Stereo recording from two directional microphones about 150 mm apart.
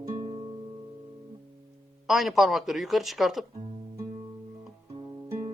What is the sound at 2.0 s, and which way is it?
Speech, centre (ahead or behind).